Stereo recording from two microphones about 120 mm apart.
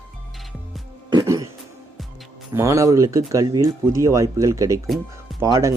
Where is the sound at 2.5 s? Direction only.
25° right (ahead or behind).